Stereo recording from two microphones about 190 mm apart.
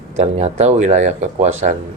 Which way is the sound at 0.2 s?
35° right (ahead or behind).